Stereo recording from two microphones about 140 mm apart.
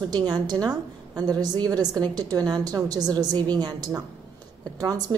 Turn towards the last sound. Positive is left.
turn(degrees=-25)  # may be behind; listen again after turning